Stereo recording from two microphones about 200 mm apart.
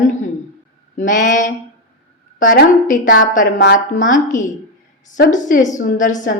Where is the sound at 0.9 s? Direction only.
40° left (ahead or behind).